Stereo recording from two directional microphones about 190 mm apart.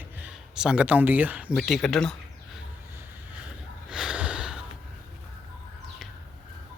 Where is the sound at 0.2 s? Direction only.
5° right (ahead or behind).